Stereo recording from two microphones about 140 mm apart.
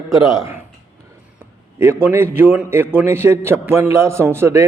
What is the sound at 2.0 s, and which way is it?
A man's voice, 15° right (ahead or behind).